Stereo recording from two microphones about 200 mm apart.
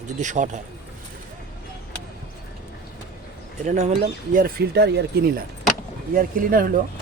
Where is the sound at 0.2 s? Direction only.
40° right (ahead or behind).